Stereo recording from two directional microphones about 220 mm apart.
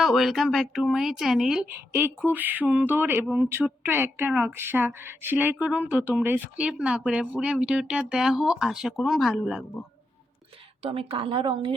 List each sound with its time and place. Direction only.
0.0 s speech: centre (ahead or behind)
10.8 s a woman's voice: 25° right (ahead or behind)